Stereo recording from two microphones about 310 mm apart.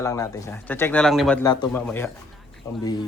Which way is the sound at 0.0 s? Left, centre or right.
Centre.